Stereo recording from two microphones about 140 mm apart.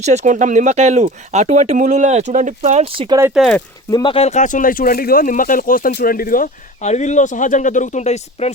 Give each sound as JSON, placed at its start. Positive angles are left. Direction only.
{"t": 0.0, "sound": "speech", "side_deg": -55}
{"t": 3.3, "sound": "speech", "side_deg": 0}
{"t": 3.9, "sound": "speech", "side_deg": 40}
{"t": 6.8, "sound": "speech", "side_deg": 55}